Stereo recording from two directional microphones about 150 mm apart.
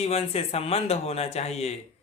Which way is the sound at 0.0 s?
45° left (ahead or behind).